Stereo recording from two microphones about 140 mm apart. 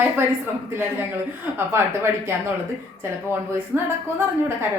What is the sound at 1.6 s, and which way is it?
Speech, 15° right (ahead or behind).